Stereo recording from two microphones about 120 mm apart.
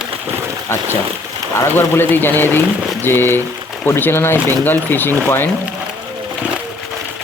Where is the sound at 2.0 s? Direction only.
15° left (ahead or behind).